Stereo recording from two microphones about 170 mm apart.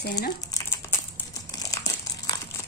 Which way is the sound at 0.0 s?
65° left (ahead or behind).